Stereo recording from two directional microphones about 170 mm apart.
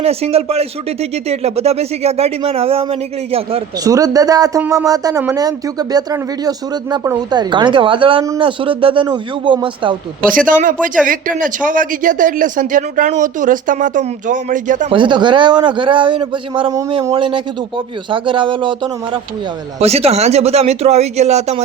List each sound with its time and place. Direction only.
0.0 s speech: 35° right (ahead or behind)
3.8 s speech: 20° right (ahead or behind)
10.2 s speech: 55° right (ahead or behind)
14.8 s speech: 30° right (ahead or behind)